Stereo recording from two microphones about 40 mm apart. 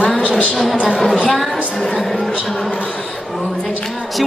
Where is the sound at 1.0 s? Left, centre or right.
Centre.